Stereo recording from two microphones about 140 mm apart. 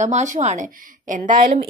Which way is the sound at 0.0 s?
60° right (ahead or behind).